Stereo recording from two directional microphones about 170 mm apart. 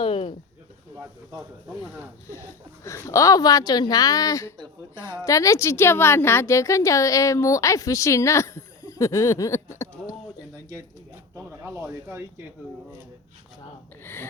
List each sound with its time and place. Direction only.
0.0 s a sound: 35° left (ahead or behind)
0.9 s speech: 20° right (ahead or behind)
2.3 s a woman's voice: 15° left (ahead or behind)
11.3 s speech: 15° right (ahead or behind)
14.0 s a woman's voice: 15° left (ahead or behind)